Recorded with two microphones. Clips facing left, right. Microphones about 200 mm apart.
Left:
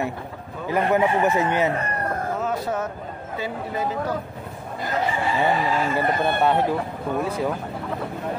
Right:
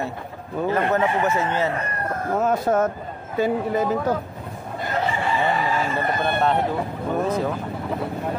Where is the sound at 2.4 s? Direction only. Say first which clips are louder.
Right 10 dB; 50° right (ahead or behind).